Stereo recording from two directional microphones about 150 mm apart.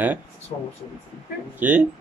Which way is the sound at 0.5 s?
30° left (ahead or behind).